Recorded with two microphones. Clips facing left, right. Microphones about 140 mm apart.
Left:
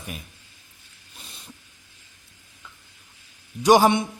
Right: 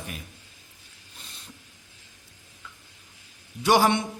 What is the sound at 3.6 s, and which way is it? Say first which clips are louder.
Speech: left 4 dB; 15° left (ahead or behind).